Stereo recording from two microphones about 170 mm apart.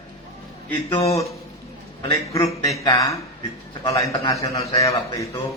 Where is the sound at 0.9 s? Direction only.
35° left (ahead or behind).